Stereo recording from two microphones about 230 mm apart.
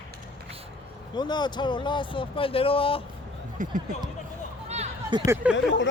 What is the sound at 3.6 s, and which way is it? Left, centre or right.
Speech, right.